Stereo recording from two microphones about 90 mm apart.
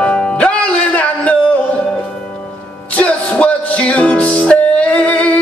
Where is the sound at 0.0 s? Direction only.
15° left (ahead or behind).